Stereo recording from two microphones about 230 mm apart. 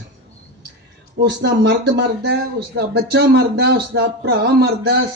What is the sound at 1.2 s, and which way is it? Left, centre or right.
Speech, right.